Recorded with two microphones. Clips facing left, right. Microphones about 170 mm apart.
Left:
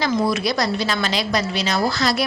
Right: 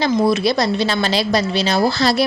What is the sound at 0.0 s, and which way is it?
A woman's voice, 25° right (ahead or behind).